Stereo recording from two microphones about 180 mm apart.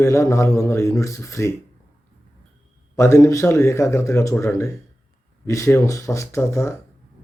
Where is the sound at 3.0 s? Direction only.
15° left (ahead or behind).